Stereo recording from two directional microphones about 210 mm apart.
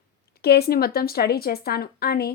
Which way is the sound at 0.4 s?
50° left (ahead or behind).